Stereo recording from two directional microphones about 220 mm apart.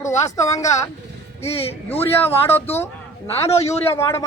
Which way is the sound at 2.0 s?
10° left (ahead or behind).